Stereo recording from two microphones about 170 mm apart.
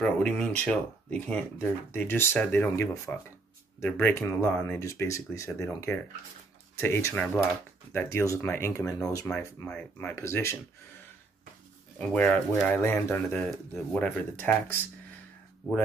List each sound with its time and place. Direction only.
0.0 s speech: 5° left (ahead or behind)
6.8 s speech: 15° left (ahead or behind)
9.2 s speech: 5° left (ahead or behind)
12.1 s speech: 5° left (ahead or behind)